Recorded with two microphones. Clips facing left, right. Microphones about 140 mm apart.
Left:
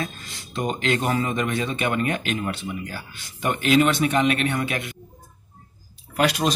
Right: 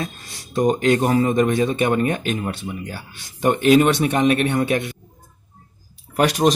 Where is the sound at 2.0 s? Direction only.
20° right (ahead or behind).